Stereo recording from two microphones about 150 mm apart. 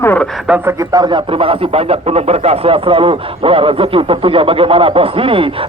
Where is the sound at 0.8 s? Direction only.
25° right (ahead or behind).